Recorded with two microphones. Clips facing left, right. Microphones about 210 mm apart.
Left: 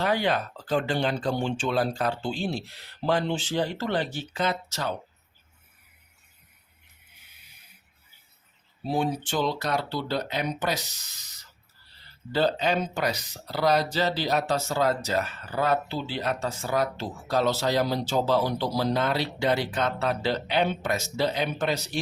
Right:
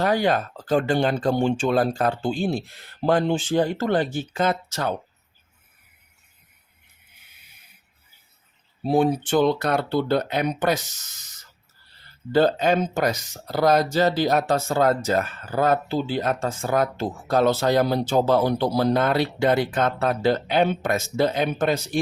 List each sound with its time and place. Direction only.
0.0 s speech: 45° right (ahead or behind)
8.8 s speech: 55° right (ahead or behind)
12.3 s speech: 50° right (ahead or behind)